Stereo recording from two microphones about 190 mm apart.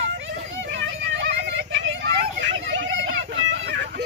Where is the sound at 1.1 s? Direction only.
70° right (ahead or behind).